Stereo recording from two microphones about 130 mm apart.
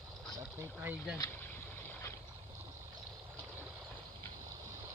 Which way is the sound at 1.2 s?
20° left (ahead or behind).